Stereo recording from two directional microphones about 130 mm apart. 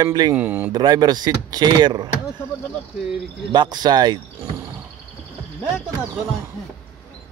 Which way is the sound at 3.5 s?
35° right (ahead or behind).